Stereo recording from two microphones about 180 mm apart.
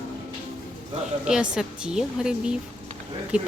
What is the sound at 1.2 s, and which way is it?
A woman's voice, 5° right (ahead or behind).